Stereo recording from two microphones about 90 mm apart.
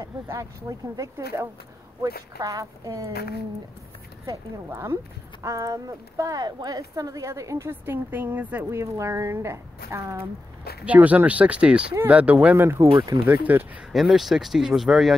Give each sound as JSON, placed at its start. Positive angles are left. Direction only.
{"t": 0.0, "sound": "speech", "side_deg": -40}
{"t": 2.0, "sound": "speech", "side_deg": -40}
{"t": 4.6, "sound": "speech", "side_deg": -30}
{"t": 8.6, "sound": "speech", "side_deg": -30}
{"t": 10.9, "sound": "speech", "side_deg": -15}
{"t": 12.8, "sound": "speech", "side_deg": -50}
{"t": 13.2, "sound": "speech", "side_deg": -20}
{"t": 13.9, "sound": "speech", "side_deg": 0}